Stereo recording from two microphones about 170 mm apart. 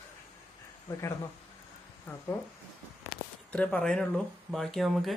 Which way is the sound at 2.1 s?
10° left (ahead or behind).